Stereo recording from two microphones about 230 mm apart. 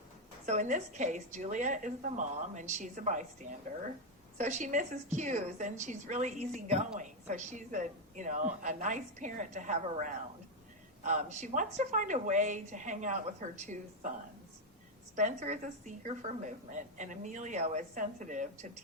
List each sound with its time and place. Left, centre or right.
0.4 s a woman's voice: right
4.4 s a woman's voice: right
15.1 s a woman's voice: right